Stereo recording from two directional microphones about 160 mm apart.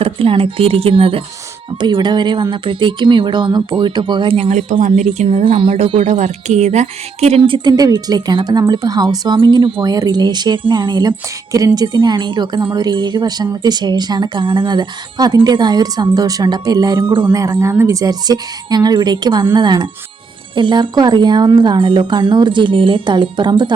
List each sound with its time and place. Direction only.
0.0 s a woman's voice: 35° right (ahead or behind)
17.2 s a woman's voice: 15° right (ahead or behind)